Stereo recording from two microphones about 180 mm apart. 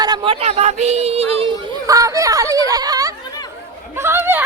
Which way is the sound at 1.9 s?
20° right (ahead or behind).